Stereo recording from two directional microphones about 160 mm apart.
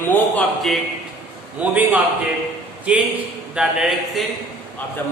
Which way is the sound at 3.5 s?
5° right (ahead or behind).